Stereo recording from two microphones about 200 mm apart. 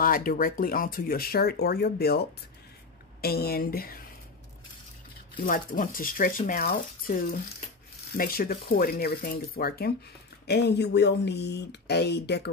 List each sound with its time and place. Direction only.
0.0 s speech: 45° left (ahead or behind)
5.4 s speech: 45° left (ahead or behind)